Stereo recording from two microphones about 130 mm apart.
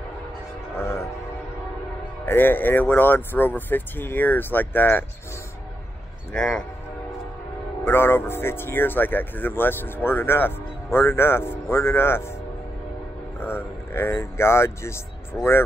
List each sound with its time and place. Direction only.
0.7 s speech: 20° left (ahead or behind)
2.2 s speech: 15° left (ahead or behind)
6.3 s speech: 5° left (ahead or behind)
7.8 s speech: 20° left (ahead or behind)
13.4 s speech: 15° left (ahead or behind)
15.3 s speech: 5° left (ahead or behind)